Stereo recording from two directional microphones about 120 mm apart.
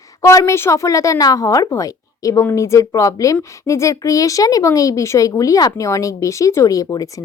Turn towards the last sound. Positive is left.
turn(degrees=30)  # may be behind; listen again after turning